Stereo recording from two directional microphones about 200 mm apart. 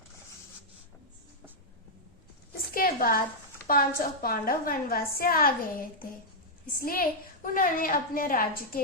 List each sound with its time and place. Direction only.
2.7 s a woman's voice: 45° left (ahead or behind)
6.8 s a woman's voice: 45° left (ahead or behind)